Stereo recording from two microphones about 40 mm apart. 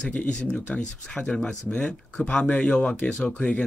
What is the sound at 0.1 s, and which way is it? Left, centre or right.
Speech, left.